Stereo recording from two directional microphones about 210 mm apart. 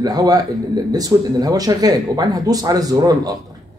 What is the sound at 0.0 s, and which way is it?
Speech, 20° right (ahead or behind).